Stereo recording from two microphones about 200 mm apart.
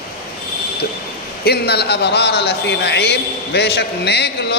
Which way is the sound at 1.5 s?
55° left (ahead or behind).